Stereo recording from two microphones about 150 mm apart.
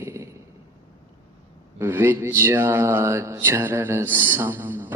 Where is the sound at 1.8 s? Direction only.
15° right (ahead or behind).